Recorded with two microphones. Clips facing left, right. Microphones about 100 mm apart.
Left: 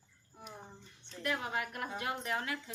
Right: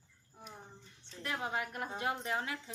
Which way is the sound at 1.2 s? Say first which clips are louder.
Left 1 dB; 25° right (ahead or behind).